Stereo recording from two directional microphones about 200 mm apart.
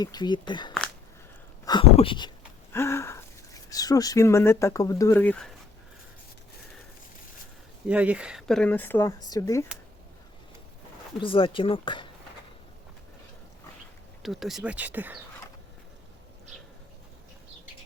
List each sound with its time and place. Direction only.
0.0 s speech: 20° left (ahead or behind)
2.7 s speech: 15° left (ahead or behind)
7.9 s speech: 5° right (ahead or behind); by 9.6 s 15° left (ahead or behind)
11.2 s speech: 25° left (ahead or behind)
14.2 s speech: centre (ahead or behind)